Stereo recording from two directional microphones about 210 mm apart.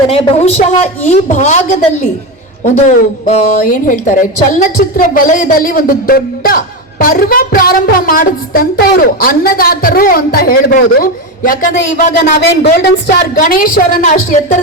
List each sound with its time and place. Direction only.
0.1 s a woman's voice: 30° left (ahead or behind)